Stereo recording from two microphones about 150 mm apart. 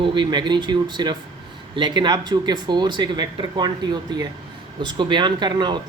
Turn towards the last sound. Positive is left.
turn(degrees=-30)  # may be behind; listen again after turning